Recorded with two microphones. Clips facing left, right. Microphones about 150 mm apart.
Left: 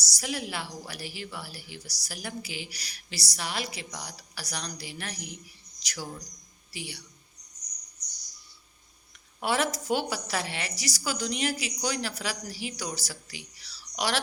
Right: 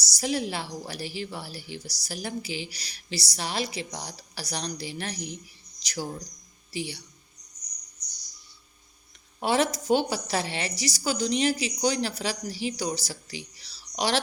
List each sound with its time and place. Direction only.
0.2 s a woman's voice: 30° right (ahead or behind)
9.4 s a woman's voice: 25° right (ahead or behind)